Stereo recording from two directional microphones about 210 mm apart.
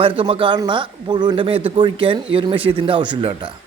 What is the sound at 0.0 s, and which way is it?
A man's voice, 25° right (ahead or behind).